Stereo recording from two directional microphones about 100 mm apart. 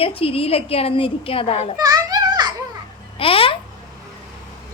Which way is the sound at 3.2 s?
65° left (ahead or behind).